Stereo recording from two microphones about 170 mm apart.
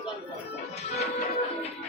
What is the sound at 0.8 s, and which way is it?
Music, 40° left (ahead or behind).